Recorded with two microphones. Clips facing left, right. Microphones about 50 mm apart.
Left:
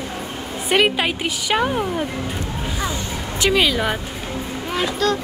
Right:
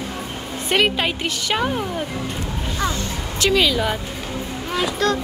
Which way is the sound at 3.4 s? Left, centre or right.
Centre.